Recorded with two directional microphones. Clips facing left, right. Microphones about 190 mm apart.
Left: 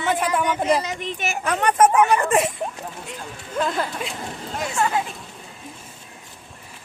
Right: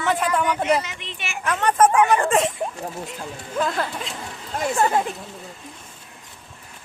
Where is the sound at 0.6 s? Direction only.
40° left (ahead or behind).